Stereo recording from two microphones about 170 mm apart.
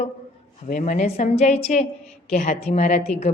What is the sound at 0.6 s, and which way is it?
A woman's voice, 45° left (ahead or behind).